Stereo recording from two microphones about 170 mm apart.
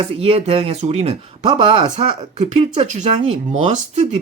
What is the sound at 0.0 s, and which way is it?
Speech, 35° right (ahead or behind).